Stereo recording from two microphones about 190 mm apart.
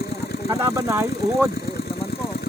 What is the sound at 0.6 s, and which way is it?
Speech, 15° right (ahead or behind).